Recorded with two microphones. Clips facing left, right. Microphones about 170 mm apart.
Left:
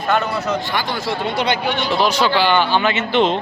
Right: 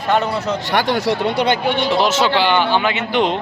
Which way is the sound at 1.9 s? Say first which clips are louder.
Even; 25° right (ahead or behind).